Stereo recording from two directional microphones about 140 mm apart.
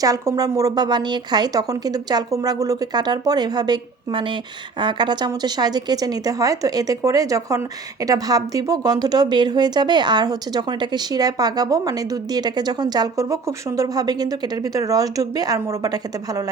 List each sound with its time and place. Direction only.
0.0 s speech: 25° right (ahead or behind)